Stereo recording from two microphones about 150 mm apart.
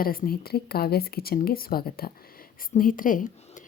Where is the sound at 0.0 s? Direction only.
75° left (ahead or behind).